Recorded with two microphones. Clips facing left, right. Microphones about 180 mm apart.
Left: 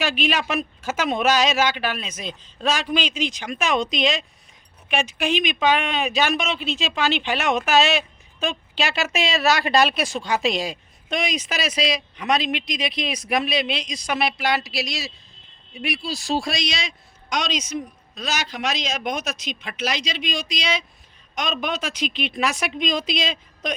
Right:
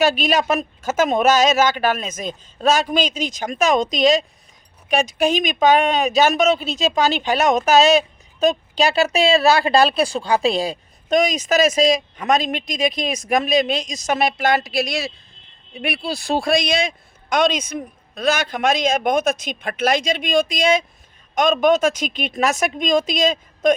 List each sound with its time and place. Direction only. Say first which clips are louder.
0.0 s a woman's voice: right 6 dB; 40° right (ahead or behind)